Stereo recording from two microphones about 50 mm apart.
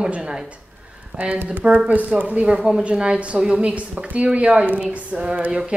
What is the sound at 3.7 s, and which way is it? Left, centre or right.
A woman's voice, right.